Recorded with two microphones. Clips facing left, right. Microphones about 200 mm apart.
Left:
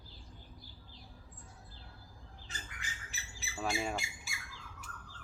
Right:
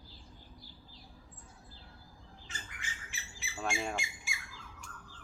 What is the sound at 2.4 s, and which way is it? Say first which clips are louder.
Squawk: right 1 dB; 35° left (ahead or behind).